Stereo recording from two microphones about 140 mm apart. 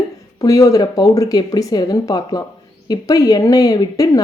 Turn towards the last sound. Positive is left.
turn(degrees=25)  # may be behind; listen again after turning